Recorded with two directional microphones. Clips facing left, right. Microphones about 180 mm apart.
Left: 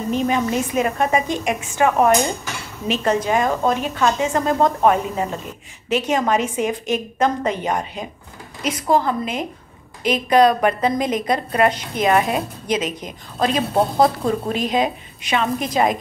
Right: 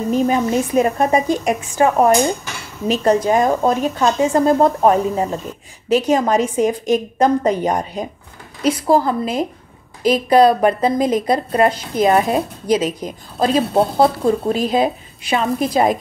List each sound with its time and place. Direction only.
0.1 s a woman's voice: 35° right (ahead or behind)
13.7 s speech: 5° right (ahead or behind)
14.5 s a woman's voice: 35° right (ahead or behind)